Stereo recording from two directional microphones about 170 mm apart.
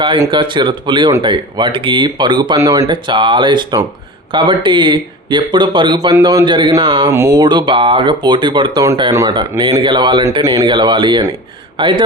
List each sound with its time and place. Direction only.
0.0 s speech: 30° right (ahead or behind)
7.1 s speech: 15° right (ahead or behind)